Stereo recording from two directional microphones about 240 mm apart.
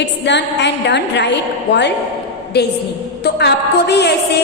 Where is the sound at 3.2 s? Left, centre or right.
Left.